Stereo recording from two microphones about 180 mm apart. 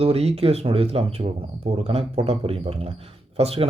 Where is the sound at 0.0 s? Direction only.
35° right (ahead or behind).